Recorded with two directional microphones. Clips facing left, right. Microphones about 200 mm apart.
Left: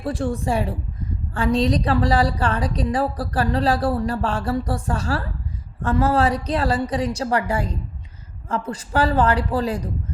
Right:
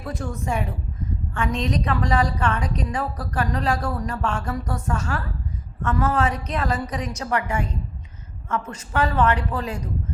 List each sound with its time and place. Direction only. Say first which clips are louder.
0.0 s a woman's voice: left 6 dB; 30° left (ahead or behind)